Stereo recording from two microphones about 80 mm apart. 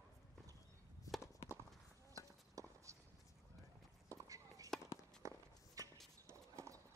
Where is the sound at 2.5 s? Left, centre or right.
Right.